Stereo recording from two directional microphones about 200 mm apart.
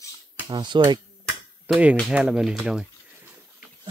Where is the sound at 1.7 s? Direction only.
5° right (ahead or behind).